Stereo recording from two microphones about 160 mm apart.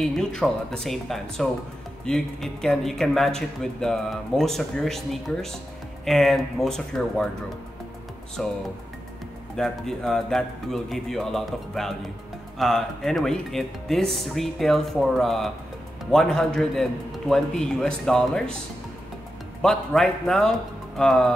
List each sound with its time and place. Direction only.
0.0 s speech: 5° left (ahead or behind)
8.4 s speech: 5° left (ahead or behind)
9.6 s speech: 5° left (ahead or behind)
19.6 s speech: 5° left (ahead or behind)